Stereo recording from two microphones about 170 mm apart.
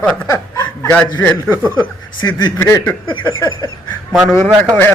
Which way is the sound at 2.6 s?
15° left (ahead or behind).